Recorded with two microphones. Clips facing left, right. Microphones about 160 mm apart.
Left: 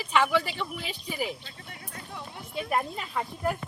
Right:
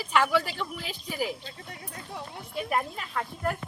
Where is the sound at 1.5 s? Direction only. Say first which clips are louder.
Right 3 dB; 35° right (ahead or behind).